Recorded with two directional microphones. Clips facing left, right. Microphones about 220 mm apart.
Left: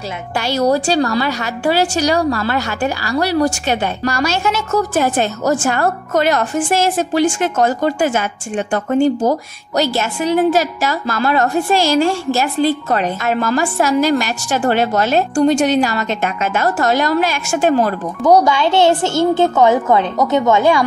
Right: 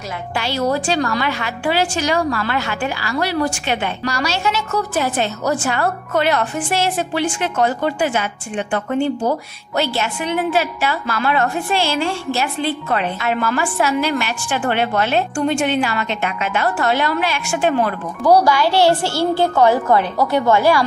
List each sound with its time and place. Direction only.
0.4 s a woman's voice: 40° left (ahead or behind)
18.2 s speech: 20° left (ahead or behind)